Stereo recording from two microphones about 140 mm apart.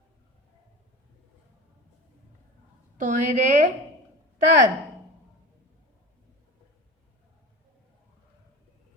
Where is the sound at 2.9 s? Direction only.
65° right (ahead or behind).